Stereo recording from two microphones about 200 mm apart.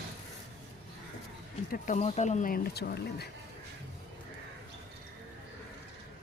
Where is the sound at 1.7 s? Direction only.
40° left (ahead or behind); by 3.3 s 55° left (ahead or behind).